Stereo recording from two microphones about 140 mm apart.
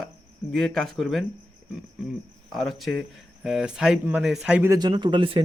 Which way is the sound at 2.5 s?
Centre (ahead or behind).